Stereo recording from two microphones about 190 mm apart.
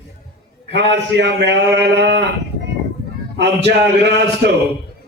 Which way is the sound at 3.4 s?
65° right (ahead or behind).